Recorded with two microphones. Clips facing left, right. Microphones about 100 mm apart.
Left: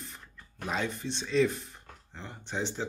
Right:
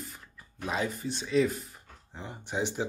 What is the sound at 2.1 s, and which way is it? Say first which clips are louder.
Speech: right 2 dB; 15° right (ahead or behind).